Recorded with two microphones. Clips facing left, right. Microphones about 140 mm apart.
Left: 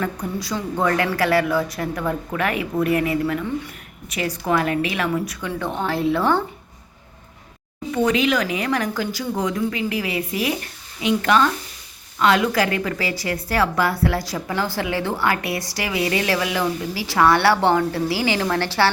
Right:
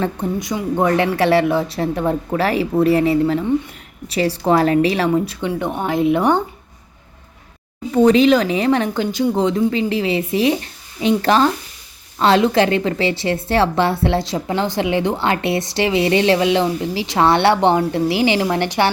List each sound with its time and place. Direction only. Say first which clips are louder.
0.0 s a woman's voice: right 5 dB; 25° right (ahead or behind)
5.5 s a woman's voice: right 4 dB; 15° right (ahead or behind)
7.9 s a woman's voice: right 7 dB; 35° right (ahead or behind)